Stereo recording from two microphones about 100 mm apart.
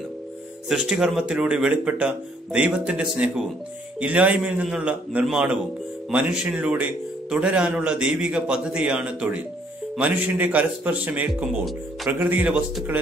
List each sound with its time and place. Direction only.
0.7 s a man's voice: 10° right (ahead or behind)